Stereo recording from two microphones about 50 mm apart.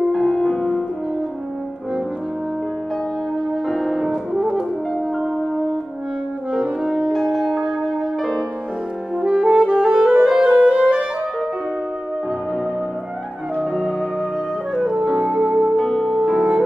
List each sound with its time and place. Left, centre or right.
0.1 s music: centre
3.6 s music: centre
6.5 s brass instrument: right
7.2 s music: centre
8.2 s music: centre
9.1 s music: right
13.6 s music: centre
14.7 s music: centre
15.0 s music: centre
16.2 s music: centre